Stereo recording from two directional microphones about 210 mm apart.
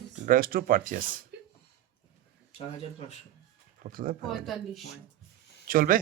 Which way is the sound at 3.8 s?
40° right (ahead or behind).